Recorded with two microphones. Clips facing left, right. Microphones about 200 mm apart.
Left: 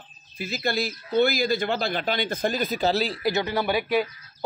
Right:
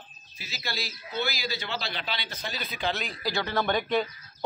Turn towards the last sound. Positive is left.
turn(degrees=10)  # may be behind; listen again after turning